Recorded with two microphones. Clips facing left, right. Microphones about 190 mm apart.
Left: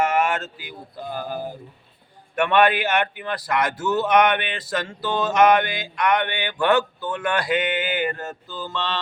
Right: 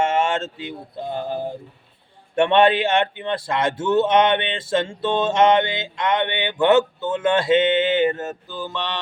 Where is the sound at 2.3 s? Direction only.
25° right (ahead or behind).